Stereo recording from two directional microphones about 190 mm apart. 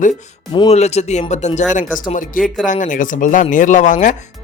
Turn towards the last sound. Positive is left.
turn(degrees=40)  # may be behind; listen again after turning